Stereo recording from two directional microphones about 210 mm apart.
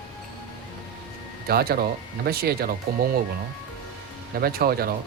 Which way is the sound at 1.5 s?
45° right (ahead or behind).